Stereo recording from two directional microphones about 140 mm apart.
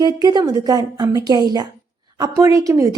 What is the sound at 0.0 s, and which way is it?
A woman's voice, 30° right (ahead or behind).